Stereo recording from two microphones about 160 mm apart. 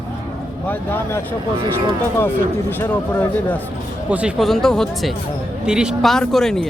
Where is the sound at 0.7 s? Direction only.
10° left (ahead or behind).